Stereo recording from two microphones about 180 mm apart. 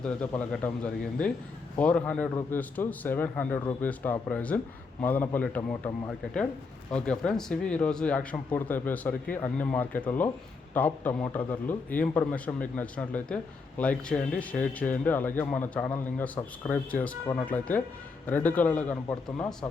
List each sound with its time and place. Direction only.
0.0 s a man's voice: 5° left (ahead or behind)